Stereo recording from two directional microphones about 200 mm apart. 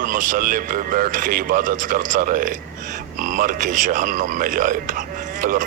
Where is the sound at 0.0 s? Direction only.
40° right (ahead or behind).